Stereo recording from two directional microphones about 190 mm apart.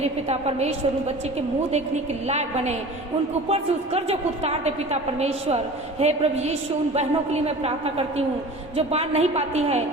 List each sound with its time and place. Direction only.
0.0 s a woman's voice: 35° right (ahead or behind)
2.2 s a woman's voice: 35° right (ahead or behind)